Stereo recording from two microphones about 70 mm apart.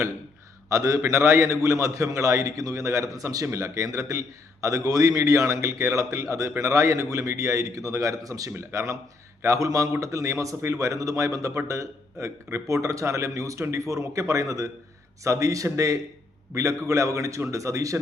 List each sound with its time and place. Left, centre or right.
0.7 s a man's voice: right
8.4 s a man's voice: right
12.6 s a man's voice: right